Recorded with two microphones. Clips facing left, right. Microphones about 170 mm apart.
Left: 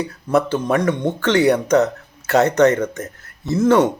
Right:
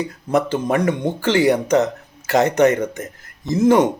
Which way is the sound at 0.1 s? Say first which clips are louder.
Left 3 dB; 15° right (ahead or behind).